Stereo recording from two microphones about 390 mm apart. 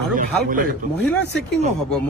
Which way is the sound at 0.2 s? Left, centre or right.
Right.